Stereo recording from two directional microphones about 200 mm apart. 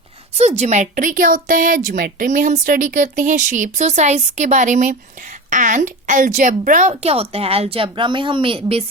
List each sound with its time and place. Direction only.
0.3 s speech: 35° right (ahead or behind)